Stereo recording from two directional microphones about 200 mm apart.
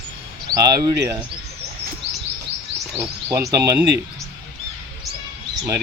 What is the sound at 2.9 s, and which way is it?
Speech, 15° right (ahead or behind).